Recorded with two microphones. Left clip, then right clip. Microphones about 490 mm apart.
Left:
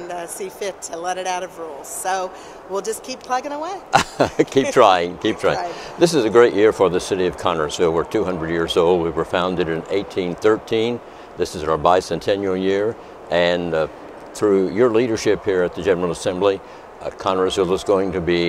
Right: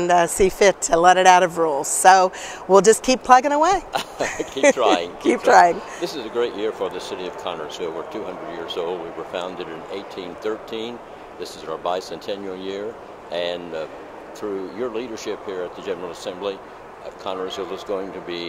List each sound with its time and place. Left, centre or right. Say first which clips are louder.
0.0 s speech: right 12 dB; right
3.9 s speech: left 8 dB; left